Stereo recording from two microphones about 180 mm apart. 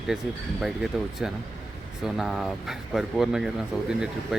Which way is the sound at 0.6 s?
Centre (ahead or behind).